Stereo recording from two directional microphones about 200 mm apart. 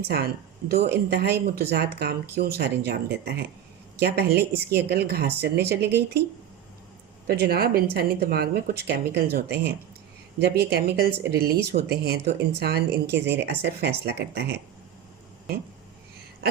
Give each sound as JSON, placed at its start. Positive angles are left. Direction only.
{"t": 0.0, "sound": "speech", "side_deg": -55}
{"t": 7.3, "sound": "speech", "side_deg": -50}
{"t": 10.4, "sound": "speech", "side_deg": -55}